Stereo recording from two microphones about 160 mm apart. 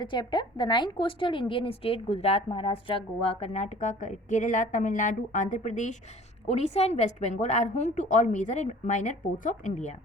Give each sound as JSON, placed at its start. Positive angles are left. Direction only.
{"t": 0.0, "sound": "a woman's voice", "side_deg": 30}